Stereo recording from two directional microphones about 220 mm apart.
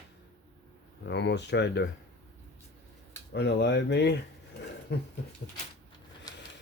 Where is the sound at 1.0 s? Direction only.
50° left (ahead or behind).